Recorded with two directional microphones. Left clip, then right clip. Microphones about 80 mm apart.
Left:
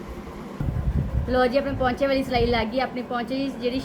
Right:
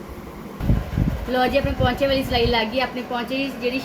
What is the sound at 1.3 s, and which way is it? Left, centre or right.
A woman's voice, right.